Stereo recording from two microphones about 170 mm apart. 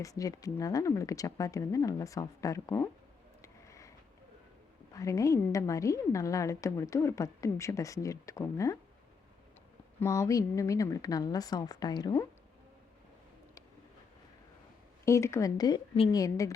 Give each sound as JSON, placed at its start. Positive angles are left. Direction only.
{"t": 0.0, "sound": "a woman's voice", "side_deg": 20}
{"t": 3.4, "sound": "a sound", "side_deg": 20}
{"t": 4.9, "sound": "a woman's voice", "side_deg": 20}
{"t": 10.0, "sound": "a woman's voice", "side_deg": 20}
{"t": 15.0, "sound": "a woman's voice", "side_deg": 15}